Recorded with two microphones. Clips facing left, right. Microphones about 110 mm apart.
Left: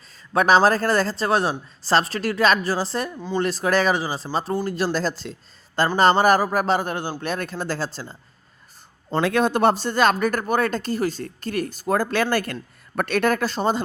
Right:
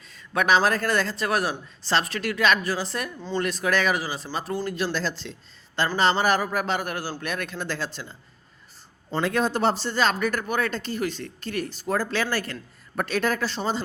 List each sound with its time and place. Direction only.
0.3 s a man's voice: 35° left (ahead or behind)
9.2 s speech: 65° left (ahead or behind); by 13.8 s 45° left (ahead or behind)